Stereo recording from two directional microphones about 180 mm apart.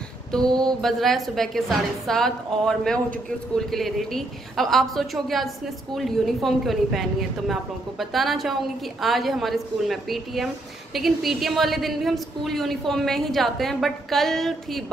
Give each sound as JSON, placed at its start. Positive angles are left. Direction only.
{"t": 0.3, "sound": "mantra", "side_deg": 5}
{"t": 0.7, "sound": "a woman's voice", "side_deg": 0}